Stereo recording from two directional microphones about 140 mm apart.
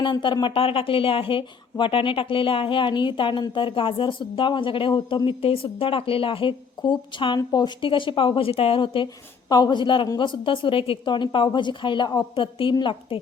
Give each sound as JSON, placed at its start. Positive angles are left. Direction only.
{"t": 0.0, "sound": "speech", "side_deg": 35}